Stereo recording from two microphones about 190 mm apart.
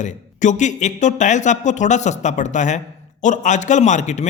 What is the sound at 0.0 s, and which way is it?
Speech, 40° left (ahead or behind).